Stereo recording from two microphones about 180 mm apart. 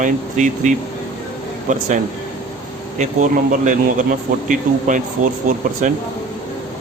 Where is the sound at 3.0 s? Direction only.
40° right (ahead or behind).